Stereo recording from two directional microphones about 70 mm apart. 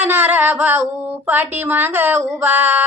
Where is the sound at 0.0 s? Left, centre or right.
Right.